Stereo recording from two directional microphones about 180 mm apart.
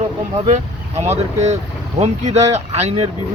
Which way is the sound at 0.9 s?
35° right (ahead or behind).